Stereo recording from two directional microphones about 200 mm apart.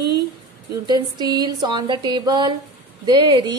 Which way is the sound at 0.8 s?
20° right (ahead or behind).